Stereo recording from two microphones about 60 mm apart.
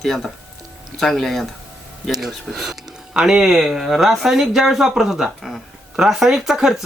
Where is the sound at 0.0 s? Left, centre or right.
Centre.